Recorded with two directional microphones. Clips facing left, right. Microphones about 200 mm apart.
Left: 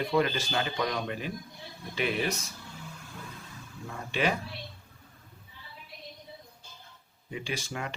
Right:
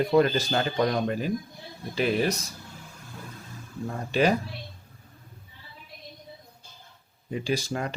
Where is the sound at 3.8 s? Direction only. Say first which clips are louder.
Right 6 dB; 40° right (ahead or behind).